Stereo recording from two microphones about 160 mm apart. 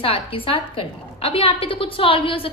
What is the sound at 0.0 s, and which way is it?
A woman's voice, 35° left (ahead or behind).